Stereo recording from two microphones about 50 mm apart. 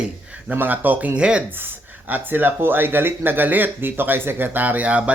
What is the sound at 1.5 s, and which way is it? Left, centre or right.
Speech, right.